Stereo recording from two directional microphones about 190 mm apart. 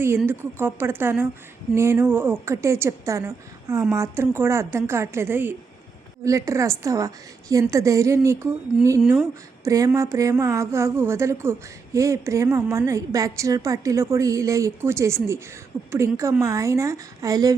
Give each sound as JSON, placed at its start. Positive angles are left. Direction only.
{"t": 0.3, "sound": "a woman's voice", "side_deg": -10}
{"t": 9.0, "sound": "speech", "side_deg": 0}
{"t": 9.6, "sound": "a woman's voice", "side_deg": -15}